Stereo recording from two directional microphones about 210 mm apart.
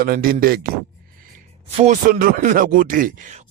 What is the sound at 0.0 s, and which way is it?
Speech, 45° right (ahead or behind).